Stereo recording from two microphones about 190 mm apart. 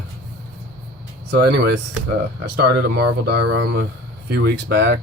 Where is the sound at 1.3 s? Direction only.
60° right (ahead or behind).